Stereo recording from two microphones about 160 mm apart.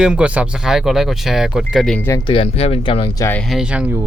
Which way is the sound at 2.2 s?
35° left (ahead or behind).